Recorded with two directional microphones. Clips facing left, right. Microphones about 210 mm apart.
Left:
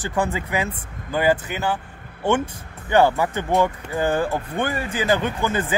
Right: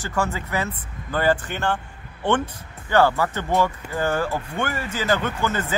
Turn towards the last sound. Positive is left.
turn(degrees=15)  # may be behind; listen again after turning